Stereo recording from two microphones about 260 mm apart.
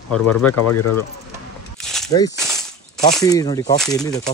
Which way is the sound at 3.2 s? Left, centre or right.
Centre.